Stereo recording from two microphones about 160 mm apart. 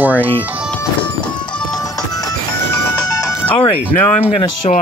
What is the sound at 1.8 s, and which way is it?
Music, 20° left (ahead or behind).